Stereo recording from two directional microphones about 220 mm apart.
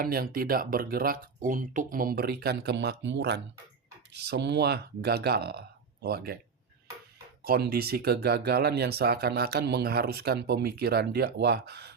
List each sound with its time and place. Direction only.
0.0 s speech: 40° right (ahead or behind)
7.4 s speech: 45° right (ahead or behind)